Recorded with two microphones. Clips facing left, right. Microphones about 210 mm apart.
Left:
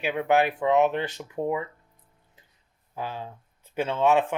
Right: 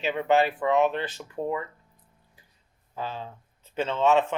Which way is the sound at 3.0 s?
10° left (ahead or behind).